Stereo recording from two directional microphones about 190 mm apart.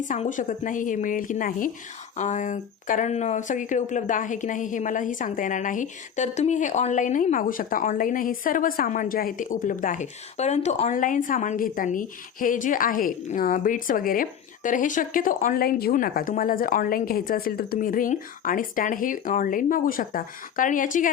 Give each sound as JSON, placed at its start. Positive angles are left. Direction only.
{"t": 0.0, "sound": "speech", "side_deg": 40}